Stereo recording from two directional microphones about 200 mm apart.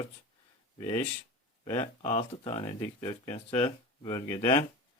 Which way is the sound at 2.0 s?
35° left (ahead or behind).